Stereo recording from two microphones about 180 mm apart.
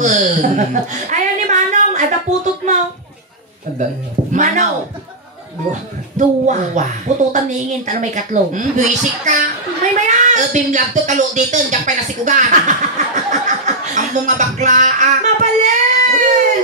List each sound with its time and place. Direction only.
0.0 s chuckle: 40° right (ahead or behind)
4.3 s speech: 40° right (ahead or behind)
5.7 s a woman's voice: 40° right (ahead or behind)